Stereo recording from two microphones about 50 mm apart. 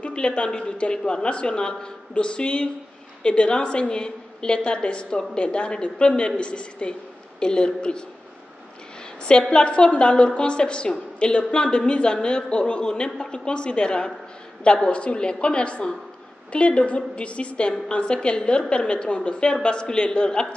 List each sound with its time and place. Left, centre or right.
0.0 s a woman's voice: centre
9.5 s a woman's voice: left